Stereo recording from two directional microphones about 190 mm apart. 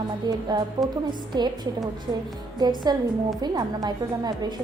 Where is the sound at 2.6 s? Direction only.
20° right (ahead or behind).